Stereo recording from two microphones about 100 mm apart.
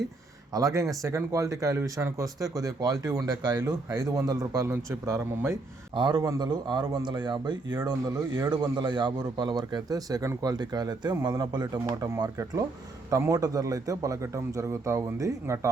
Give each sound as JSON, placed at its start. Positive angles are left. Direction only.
{"t": 0.5, "sound": "speech", "side_deg": -35}
{"t": 5.9, "sound": "a man's voice", "side_deg": -50}
{"t": 6.2, "sound": "a man's voice", "side_deg": -40}
{"t": 7.8, "sound": "a man's voice", "side_deg": -35}